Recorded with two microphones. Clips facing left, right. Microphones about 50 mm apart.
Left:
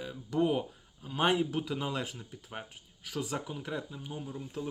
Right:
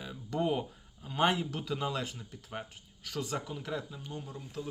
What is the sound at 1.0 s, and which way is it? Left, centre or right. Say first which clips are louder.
Speech: left 1 dB; centre.